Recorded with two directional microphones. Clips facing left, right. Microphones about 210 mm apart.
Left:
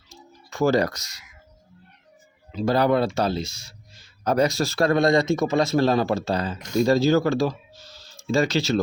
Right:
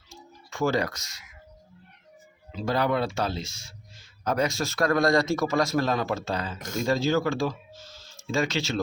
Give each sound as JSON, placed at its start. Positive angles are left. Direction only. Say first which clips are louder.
{"t": 0.5, "sound": "speech", "louder": "left 5 dB", "side_deg": 40}
{"t": 2.6, "sound": "speech", "louder": "left 5 dB", "side_deg": 40}